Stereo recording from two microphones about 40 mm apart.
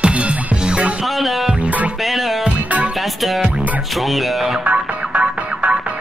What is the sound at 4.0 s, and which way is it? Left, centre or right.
Speech, centre.